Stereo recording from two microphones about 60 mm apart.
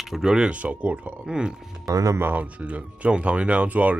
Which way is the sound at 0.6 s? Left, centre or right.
Right.